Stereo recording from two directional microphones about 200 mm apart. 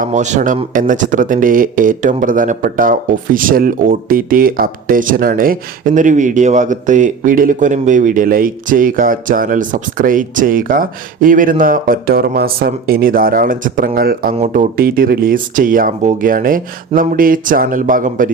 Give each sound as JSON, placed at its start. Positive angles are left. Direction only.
{"t": 0.0, "sound": "speech", "side_deg": -35}
{"t": 14.3, "sound": "speech", "side_deg": -35}